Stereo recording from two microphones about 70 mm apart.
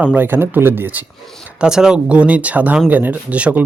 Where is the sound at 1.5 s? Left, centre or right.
Centre.